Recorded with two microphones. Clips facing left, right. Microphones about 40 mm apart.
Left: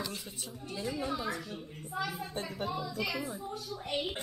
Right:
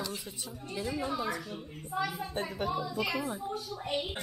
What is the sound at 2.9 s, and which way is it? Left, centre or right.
Speech, right.